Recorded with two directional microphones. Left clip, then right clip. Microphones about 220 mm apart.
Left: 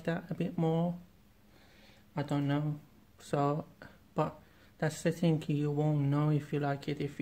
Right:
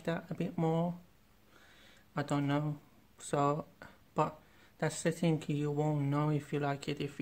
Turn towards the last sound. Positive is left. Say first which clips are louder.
# left 1 dB
turn(degrees=-10)  # may be behind; listen again after turning